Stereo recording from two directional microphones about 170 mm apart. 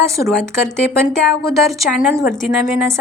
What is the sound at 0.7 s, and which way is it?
Speech, 5° left (ahead or behind).